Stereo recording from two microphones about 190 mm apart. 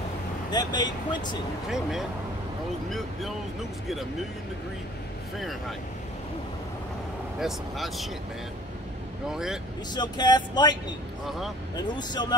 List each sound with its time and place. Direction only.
0.5 s speech: 20° left (ahead or behind)
1.7 s speech: centre (ahead or behind)
5.4 s speech: centre (ahead or behind)
7.3 s speech: centre (ahead or behind)
9.3 s speech: 5° right (ahead or behind)
9.9 s speech: 20° left (ahead or behind)
11.2 s speech: centre (ahead or behind)
11.7 s speech: 20° left (ahead or behind)